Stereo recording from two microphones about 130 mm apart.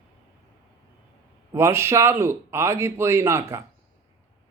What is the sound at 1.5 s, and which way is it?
Speech, 20° right (ahead or behind).